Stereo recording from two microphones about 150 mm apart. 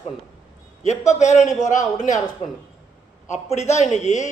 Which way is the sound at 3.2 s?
50° left (ahead or behind).